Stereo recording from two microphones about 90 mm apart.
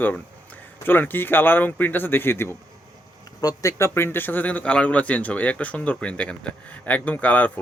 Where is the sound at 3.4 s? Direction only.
40° left (ahead or behind).